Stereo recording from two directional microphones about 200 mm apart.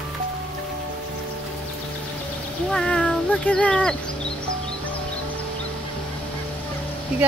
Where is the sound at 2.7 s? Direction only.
5° left (ahead or behind).